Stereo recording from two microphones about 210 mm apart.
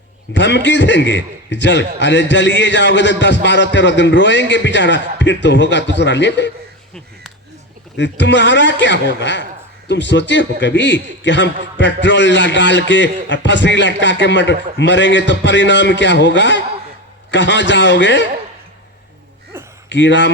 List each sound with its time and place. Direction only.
0.3 s a man's voice: 55° left (ahead or behind)
7.9 s a man's voice: 55° left (ahead or behind)
19.5 s a sound: 10° right (ahead or behind)
19.9 s a man's voice: 60° left (ahead or behind)